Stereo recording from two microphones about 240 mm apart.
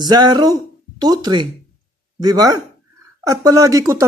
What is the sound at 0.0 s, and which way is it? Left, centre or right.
Speech, centre.